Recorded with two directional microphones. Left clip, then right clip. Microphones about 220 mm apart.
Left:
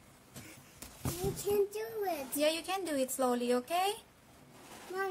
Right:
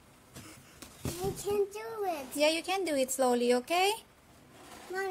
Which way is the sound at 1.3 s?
10° right (ahead or behind).